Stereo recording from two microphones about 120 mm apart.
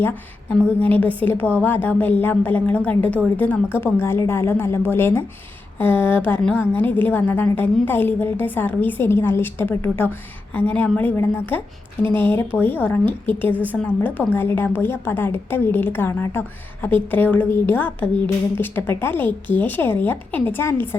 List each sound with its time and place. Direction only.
0.6 s a woman's voice: 15° left (ahead or behind)